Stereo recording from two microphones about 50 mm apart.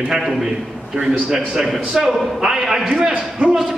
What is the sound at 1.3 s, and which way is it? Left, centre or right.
A man's voice, centre.